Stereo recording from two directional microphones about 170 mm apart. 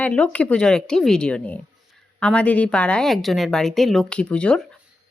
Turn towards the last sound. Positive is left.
turn(degrees=5)  # may be behind; listen again after turning